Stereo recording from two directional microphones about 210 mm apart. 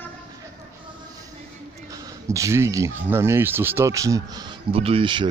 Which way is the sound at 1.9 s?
15° right (ahead or behind).